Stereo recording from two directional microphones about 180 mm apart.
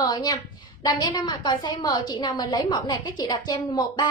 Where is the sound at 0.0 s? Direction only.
20° left (ahead or behind).